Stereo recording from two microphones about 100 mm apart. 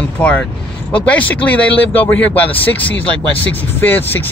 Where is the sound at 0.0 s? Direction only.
10° left (ahead or behind).